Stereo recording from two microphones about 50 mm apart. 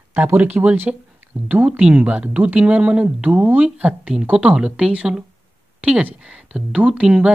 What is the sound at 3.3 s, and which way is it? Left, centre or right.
Speech, right.